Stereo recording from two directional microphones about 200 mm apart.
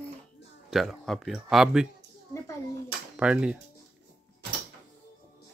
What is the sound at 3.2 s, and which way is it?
Speech, 5° right (ahead or behind).